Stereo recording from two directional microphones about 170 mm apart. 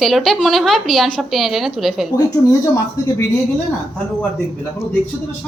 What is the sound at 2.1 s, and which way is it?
Speech, 20° left (ahead or behind).